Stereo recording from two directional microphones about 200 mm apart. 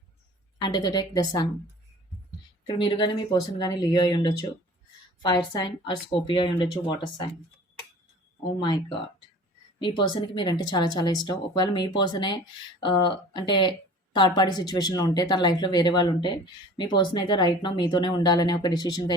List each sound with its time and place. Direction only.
0.6 s speech: 20° left (ahead or behind)
2.6 s speech: 25° left (ahead or behind)
9.8 s speech: 25° left (ahead or behind)